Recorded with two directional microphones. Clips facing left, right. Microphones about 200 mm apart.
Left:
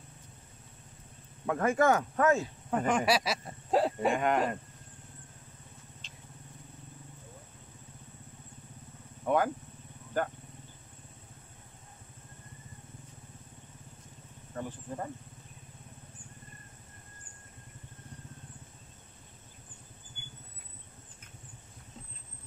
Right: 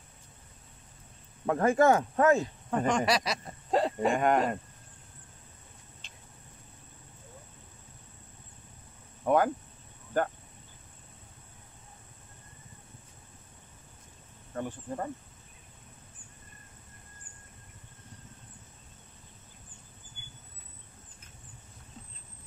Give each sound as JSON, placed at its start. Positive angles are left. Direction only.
{"t": 1.4, "sound": "speech", "side_deg": -35}
{"t": 2.4, "sound": "speech", "side_deg": 5}
{"t": 4.1, "sound": "speech", "side_deg": -45}
{"t": 6.0, "sound": "vehicle", "side_deg": -55}
{"t": 9.2, "sound": "speech", "side_deg": -50}
{"t": 14.5, "sound": "speech", "side_deg": -50}